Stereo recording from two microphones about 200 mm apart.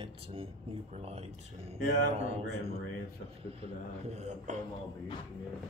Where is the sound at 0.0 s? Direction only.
30° right (ahead or behind).